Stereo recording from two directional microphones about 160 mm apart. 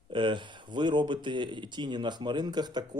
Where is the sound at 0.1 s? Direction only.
30° right (ahead or behind).